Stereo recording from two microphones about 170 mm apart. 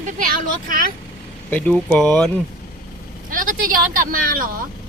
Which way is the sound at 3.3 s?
50° right (ahead or behind).